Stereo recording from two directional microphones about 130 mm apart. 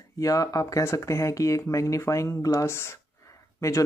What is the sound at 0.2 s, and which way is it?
Speech, 25° left (ahead or behind).